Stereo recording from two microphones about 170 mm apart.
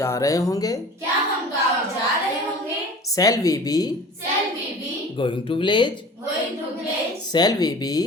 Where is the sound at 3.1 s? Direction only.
20° left (ahead or behind).